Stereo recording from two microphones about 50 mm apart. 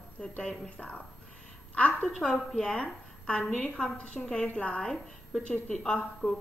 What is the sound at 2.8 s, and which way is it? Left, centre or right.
A woman's voice, left.